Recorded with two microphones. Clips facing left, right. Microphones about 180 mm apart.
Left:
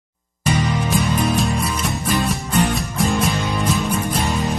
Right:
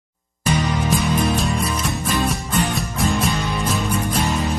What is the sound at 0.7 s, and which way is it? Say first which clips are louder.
Music: even; centre (ahead or behind).